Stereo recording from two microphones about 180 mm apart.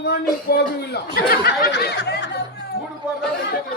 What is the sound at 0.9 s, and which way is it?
Speech, 60° left (ahead or behind).